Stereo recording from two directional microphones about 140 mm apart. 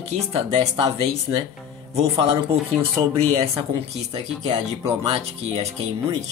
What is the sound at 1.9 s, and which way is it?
Speech, 45° right (ahead or behind).